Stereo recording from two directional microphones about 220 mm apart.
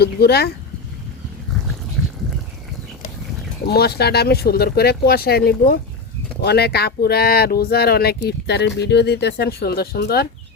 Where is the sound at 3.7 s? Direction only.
45° left (ahead or behind).